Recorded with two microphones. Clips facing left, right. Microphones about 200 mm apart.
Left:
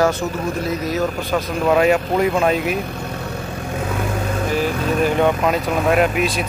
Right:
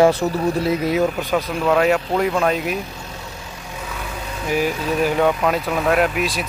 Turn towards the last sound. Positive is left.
turn(degrees=0)  # may be behind; listen again after turning